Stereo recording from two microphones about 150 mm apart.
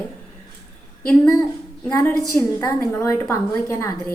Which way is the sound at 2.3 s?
20° left (ahead or behind).